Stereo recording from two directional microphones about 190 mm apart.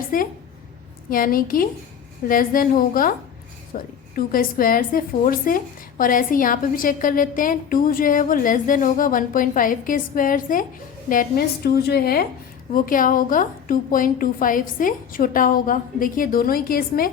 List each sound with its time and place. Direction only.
0.1 s speech: 45° left (ahead or behind)